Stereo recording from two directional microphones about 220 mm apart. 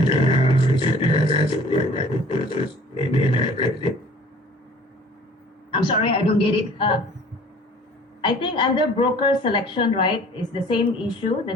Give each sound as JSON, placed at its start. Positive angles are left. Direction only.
{"t": 0.2, "sound": "a sound", "side_deg": 25}
{"t": 5.7, "sound": "a woman's voice", "side_deg": 25}
{"t": 8.2, "sound": "a woman's voice", "side_deg": 20}